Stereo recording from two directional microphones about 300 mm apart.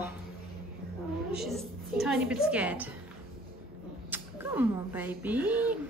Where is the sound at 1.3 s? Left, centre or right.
Centre.